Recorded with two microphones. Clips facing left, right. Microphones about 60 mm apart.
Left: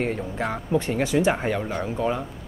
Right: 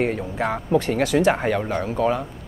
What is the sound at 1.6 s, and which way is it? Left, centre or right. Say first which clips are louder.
Speech: right 4 dB; centre.